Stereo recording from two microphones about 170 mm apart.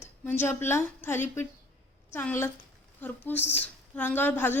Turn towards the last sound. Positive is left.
turn(degrees=10)  # may be behind; listen again after turning